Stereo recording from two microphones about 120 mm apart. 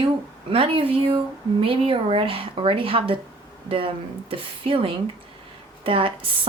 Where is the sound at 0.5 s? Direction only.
50° right (ahead or behind).